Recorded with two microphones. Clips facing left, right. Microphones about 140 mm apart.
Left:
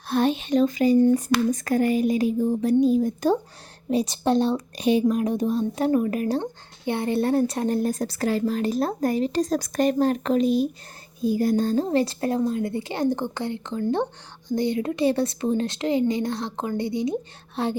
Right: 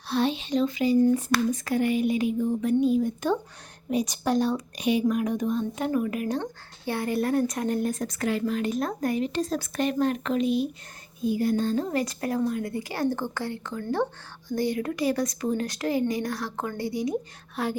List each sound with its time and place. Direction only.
0.1 s a woman's voice: 50° left (ahead or behind)
6.4 s a woman's voice: 20° left (ahead or behind)